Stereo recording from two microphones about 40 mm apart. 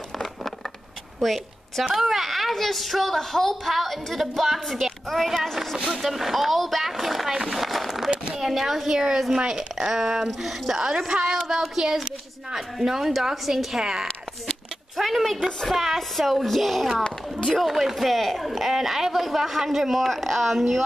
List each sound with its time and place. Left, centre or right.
1.2 s a woman's voice: centre
15.0 s a sound: centre
15.6 s a woman's voice: centre
17.0 s speech: left
17.6 s a woman's voice: centre